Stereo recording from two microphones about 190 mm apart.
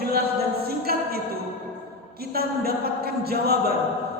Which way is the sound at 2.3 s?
55° right (ahead or behind).